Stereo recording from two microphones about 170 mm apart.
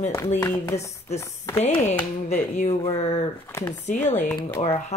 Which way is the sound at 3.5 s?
15° left (ahead or behind).